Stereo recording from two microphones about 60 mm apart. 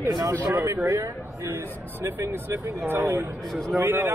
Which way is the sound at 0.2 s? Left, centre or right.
Right.